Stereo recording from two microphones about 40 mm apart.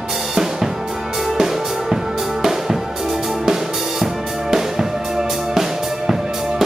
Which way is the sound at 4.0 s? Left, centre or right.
Centre.